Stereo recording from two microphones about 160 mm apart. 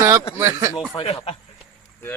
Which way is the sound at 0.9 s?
35° left (ahead or behind).